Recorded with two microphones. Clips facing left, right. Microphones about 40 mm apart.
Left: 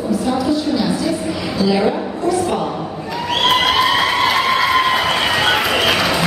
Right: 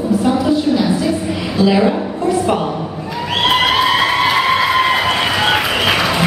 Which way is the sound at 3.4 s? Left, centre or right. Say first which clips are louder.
Right 1 dB; centre.